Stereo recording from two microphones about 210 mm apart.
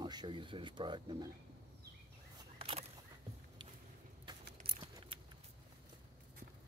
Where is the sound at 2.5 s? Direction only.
25° right (ahead or behind).